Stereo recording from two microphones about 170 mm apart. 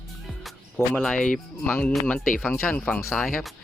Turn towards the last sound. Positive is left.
turn(degrees=0)  # may be behind; listen again after turning